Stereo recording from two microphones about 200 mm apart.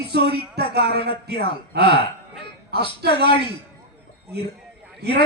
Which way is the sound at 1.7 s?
55° right (ahead or behind).